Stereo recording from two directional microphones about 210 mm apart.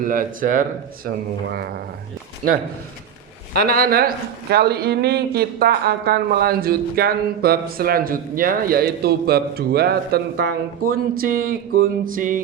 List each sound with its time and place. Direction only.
0.0 s speech: 40° right (ahead or behind)
3.5 s a man's voice: 45° right (ahead or behind)